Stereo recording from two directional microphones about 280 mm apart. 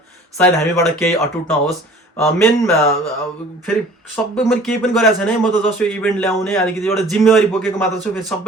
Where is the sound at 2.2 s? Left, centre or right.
Centre.